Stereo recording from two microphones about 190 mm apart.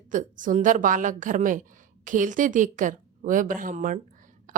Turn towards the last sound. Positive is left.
turn(degrees=-45)  # may be behind; listen again after turning